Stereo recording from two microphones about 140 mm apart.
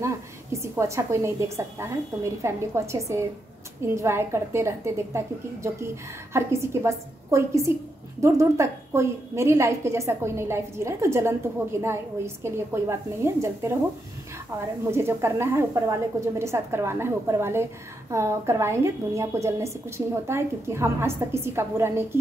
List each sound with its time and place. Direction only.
0.0 s a woman's voice: 20° right (ahead or behind)
14.9 s a woman's voice: 20° right (ahead or behind)